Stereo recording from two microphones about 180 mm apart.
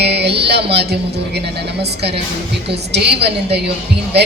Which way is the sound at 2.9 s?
65° right (ahead or behind).